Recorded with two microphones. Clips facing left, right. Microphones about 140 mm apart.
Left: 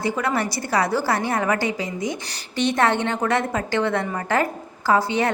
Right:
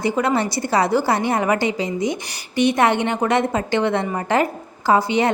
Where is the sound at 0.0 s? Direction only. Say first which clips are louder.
Right 4 dB; 20° right (ahead or behind).